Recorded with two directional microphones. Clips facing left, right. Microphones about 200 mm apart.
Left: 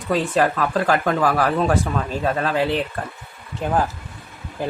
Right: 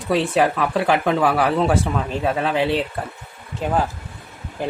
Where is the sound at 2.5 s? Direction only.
20° right (ahead or behind).